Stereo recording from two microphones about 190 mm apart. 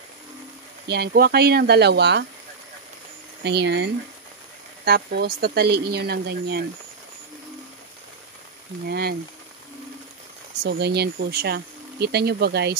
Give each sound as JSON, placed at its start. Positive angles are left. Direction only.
{"t": 0.8, "sound": "speech", "side_deg": -60}
{"t": 3.4, "sound": "speech", "side_deg": -65}
{"t": 8.8, "sound": "speech", "side_deg": -55}
{"t": 10.6, "sound": "speech", "side_deg": -60}